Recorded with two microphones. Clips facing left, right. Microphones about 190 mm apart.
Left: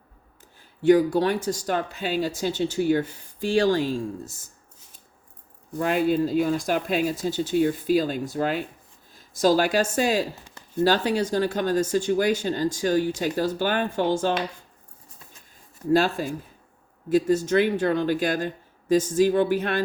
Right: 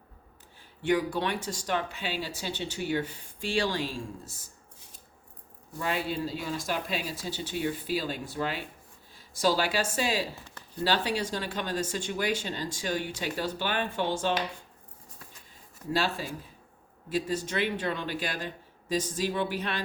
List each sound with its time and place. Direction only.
0.8 s speech: 40° left (ahead or behind)
5.8 s speech: 50° left (ahead or behind)
15.9 s speech: 50° left (ahead or behind)